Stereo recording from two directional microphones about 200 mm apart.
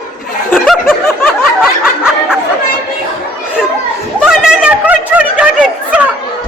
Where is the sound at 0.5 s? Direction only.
10° left (ahead or behind).